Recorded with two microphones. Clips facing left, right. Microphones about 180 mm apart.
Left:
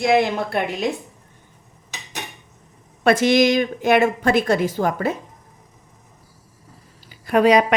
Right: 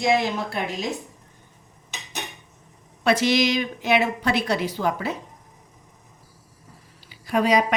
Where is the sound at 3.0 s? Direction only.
50° left (ahead or behind).